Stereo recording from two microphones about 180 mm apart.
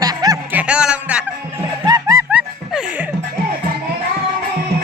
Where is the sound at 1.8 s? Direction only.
20° right (ahead or behind).